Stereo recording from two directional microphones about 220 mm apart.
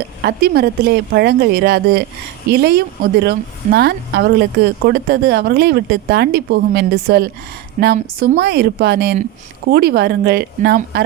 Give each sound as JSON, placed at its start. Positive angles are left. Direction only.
{"t": 0.2, "sound": "speech", "side_deg": -45}